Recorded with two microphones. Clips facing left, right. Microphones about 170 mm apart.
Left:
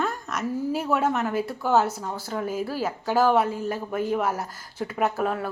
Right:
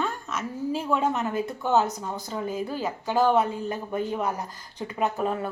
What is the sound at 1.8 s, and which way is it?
Speech, 15° right (ahead or behind).